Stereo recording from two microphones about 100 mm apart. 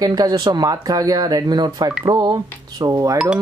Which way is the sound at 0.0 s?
40° right (ahead or behind).